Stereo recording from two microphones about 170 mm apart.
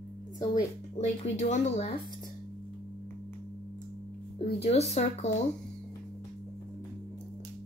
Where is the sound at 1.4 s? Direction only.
40° left (ahead or behind).